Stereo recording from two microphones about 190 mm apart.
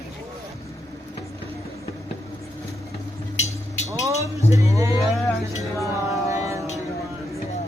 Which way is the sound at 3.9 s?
15° right (ahead or behind).